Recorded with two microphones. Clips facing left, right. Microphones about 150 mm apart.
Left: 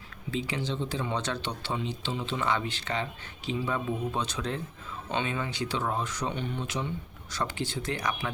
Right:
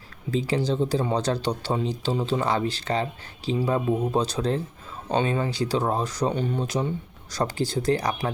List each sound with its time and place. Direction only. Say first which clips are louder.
0.3 s speech: right 8 dB; 35° right (ahead or behind)